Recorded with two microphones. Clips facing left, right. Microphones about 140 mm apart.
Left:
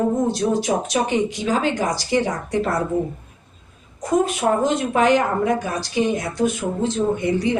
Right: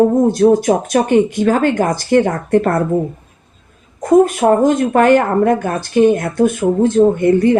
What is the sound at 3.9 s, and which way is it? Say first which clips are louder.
Speech: right 9 dB; 50° right (ahead or behind).